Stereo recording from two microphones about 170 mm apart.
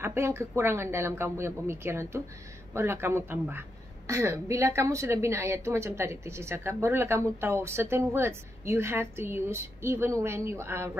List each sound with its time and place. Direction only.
0.0 s a woman's voice: 15° right (ahead or behind)